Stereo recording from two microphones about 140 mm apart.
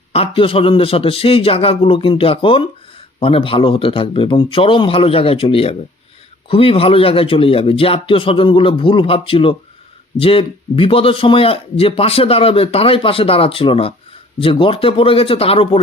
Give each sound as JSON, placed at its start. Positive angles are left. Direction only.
{"t": 0.1, "sound": "speech", "side_deg": 40}